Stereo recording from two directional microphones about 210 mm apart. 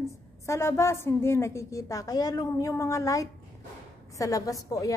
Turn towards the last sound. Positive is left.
turn(degrees=15)  # may be behind; listen again after turning